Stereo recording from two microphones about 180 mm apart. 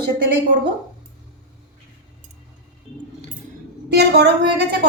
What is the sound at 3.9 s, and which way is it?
Speech, 65° right (ahead or behind).